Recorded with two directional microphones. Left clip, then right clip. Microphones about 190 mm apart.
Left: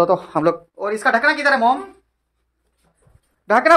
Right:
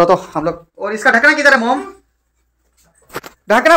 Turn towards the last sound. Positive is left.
turn(degrees=-5)  # may be behind; listen again after turning